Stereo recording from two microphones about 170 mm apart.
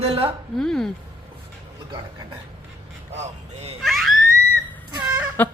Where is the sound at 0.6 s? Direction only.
5° left (ahead or behind).